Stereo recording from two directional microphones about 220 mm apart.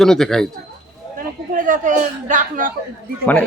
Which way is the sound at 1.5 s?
35° right (ahead or behind).